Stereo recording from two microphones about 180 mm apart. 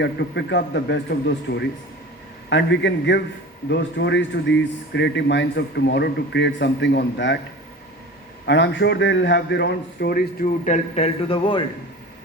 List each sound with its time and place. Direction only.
0.0 s a man's voice: 75° left (ahead or behind)
8.4 s speech: 75° left (ahead or behind); by 10.2 s 60° left (ahead or behind)
10.4 s a man's voice: 40° left (ahead or behind)